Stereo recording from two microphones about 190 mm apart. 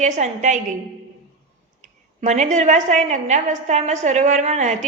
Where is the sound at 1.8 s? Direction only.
40° right (ahead or behind).